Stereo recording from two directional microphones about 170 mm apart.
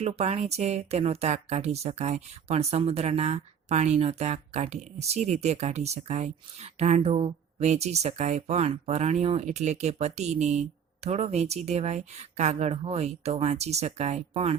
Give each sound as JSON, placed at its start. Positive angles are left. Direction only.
{"t": 0.0, "sound": "speech", "side_deg": -40}